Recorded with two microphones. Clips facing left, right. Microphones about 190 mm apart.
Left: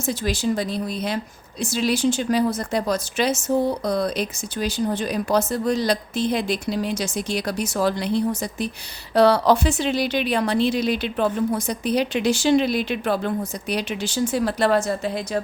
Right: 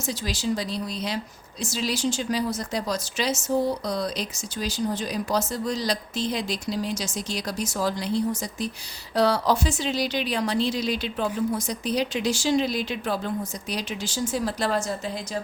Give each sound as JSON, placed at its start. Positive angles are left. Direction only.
{"t": 0.0, "sound": "speech", "side_deg": 55}